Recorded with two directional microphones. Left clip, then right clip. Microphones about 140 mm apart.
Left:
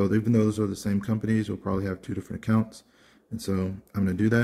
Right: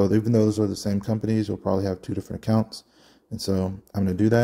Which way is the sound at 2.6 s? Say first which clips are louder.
Right 7 dB; 15° right (ahead or behind).